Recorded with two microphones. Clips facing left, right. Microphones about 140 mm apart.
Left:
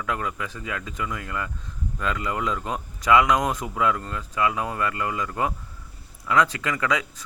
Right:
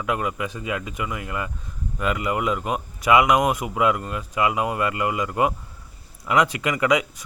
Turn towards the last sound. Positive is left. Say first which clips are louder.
# right 5 dB
turn(degrees=-15)  # may be behind; listen again after turning